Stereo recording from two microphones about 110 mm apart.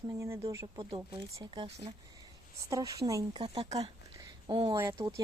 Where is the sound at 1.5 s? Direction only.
45° right (ahead or behind).